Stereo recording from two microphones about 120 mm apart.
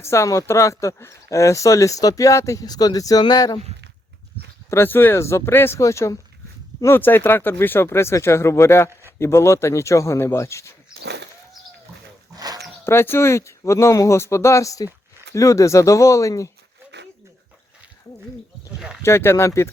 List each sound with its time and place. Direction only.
0.0 s speech: 25° left (ahead or behind)
4.7 s speech: 20° left (ahead or behind)
12.8 s speech: 20° left (ahead or behind)
19.0 s speech: 20° left (ahead or behind)